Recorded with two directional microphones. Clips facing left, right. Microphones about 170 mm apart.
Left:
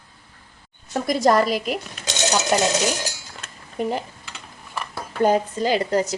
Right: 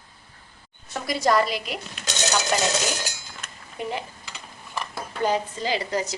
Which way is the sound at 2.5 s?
40° left (ahead or behind).